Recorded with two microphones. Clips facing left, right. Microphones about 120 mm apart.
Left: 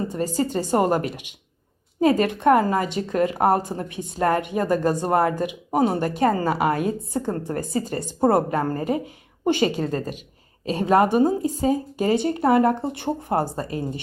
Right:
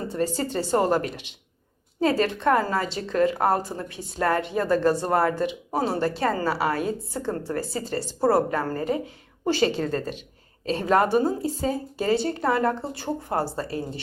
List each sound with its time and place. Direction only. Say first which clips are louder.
0.3 s a woman's voice: left 4 dB; 15° left (ahead or behind)